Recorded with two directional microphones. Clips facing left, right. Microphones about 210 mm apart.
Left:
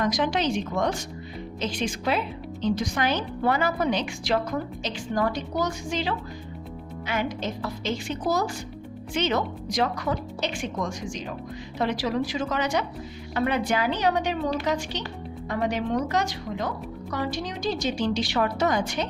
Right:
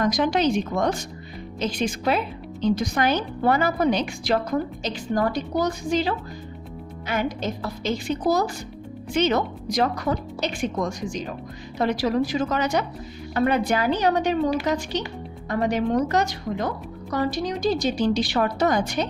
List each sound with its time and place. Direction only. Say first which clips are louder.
0.0 s a woman's voice: right 4 dB; 45° right (ahead or behind)
1.9 s a woman's voice: right 3 dB; 45° right (ahead or behind)
15.4 s a woman's voice: right 4 dB; 45° right (ahead or behind)